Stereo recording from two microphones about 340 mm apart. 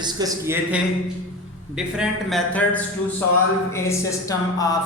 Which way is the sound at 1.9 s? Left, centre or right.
Centre.